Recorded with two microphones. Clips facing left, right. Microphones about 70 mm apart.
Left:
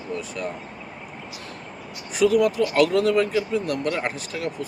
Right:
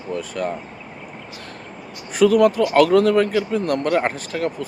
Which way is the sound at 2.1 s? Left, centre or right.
Right.